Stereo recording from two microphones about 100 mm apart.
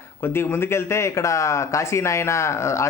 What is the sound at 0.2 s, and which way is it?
Speech, 25° left (ahead or behind).